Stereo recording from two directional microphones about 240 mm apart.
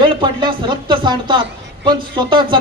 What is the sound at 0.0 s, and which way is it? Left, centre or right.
A woman's voice, centre.